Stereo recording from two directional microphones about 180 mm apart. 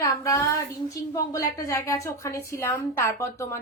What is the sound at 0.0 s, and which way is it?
A woman's voice, 15° left (ahead or behind).